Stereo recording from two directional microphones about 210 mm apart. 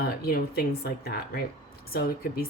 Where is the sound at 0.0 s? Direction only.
45° left (ahead or behind).